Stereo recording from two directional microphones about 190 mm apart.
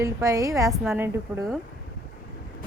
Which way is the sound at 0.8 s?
5° right (ahead or behind).